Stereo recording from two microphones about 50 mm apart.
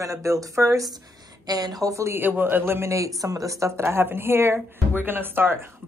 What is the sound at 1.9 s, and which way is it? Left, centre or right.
Speech, right.